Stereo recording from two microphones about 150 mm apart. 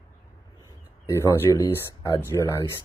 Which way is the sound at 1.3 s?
15° left (ahead or behind).